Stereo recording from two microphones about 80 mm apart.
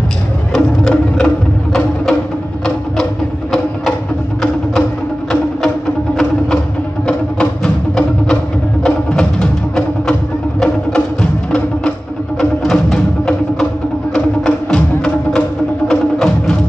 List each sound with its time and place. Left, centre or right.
0.5 s music: centre
7.1 s music: centre
12.4 s music: centre
15.9 s music: centre